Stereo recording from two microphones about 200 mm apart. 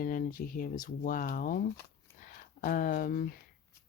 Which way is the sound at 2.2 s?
40° left (ahead or behind).